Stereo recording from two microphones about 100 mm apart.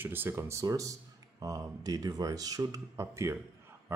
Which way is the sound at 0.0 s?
20° right (ahead or behind).